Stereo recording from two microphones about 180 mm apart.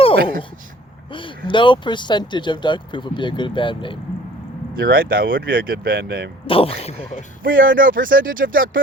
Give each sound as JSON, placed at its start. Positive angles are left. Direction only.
{"t": 1.1, "sound": "speech", "side_deg": 30}
{"t": 4.8, "sound": "speech", "side_deg": -55}
{"t": 6.5, "sound": "speech", "side_deg": 30}
{"t": 7.4, "sound": "speech", "side_deg": -50}